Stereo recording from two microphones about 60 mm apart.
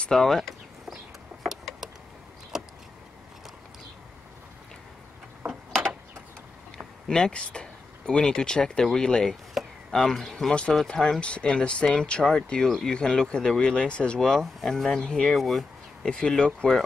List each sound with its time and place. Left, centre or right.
0.1 s a sound: centre
2.5 s vehicle: centre
7.1 s speech: centre
9.5 s chop: centre
9.9 s speech: centre
14.4 s speech: centre
14.9 s speech: centre
16.1 s speech: centre